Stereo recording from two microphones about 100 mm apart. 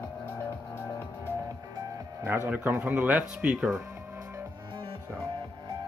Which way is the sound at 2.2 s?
20° right (ahead or behind).